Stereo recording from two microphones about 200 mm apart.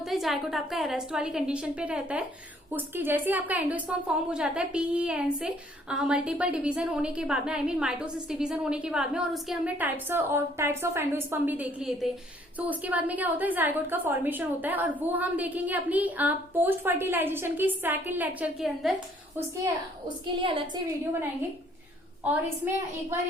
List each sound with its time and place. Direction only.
0.0 s a woman's voice: centre (ahead or behind)
20.4 s a woman's voice: 25° right (ahead or behind)
22.2 s a woman's voice: 10° right (ahead or behind)